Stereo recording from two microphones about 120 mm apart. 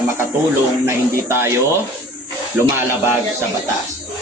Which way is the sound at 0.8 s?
20° right (ahead or behind).